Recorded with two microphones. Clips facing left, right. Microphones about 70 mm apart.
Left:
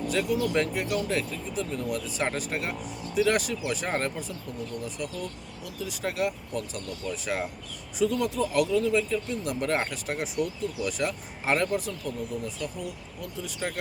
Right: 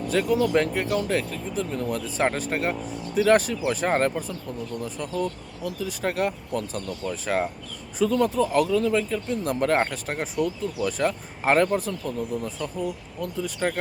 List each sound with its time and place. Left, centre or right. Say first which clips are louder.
0.1 s speech: right 6 dB; right